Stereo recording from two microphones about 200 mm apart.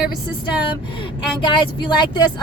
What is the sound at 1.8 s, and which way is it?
Speech, 20° left (ahead or behind).